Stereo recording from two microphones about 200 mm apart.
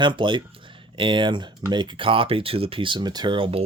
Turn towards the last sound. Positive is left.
turn(degrees=-25)  # may be behind; listen again after turning